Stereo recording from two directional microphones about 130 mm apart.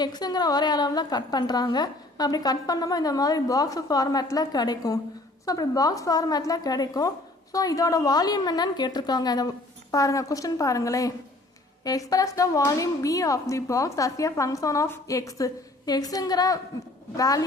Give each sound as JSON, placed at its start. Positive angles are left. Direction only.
{"t": 0.0, "sound": "a woman's voice", "side_deg": 35}